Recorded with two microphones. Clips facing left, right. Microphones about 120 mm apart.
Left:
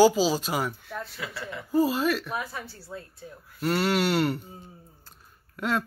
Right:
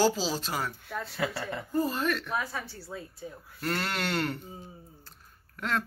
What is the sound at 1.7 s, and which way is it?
Speech, 5° left (ahead or behind).